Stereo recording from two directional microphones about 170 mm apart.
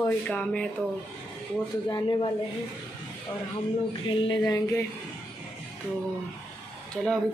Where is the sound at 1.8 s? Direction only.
20° left (ahead or behind).